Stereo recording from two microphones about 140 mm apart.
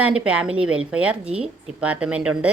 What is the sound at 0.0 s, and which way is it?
Speech, 10° right (ahead or behind).